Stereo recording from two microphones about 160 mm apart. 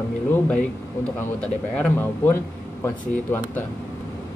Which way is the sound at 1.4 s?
10° left (ahead or behind).